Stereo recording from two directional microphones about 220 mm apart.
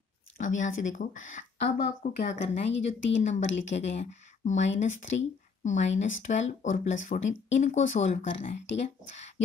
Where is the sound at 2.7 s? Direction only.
55° left (ahead or behind).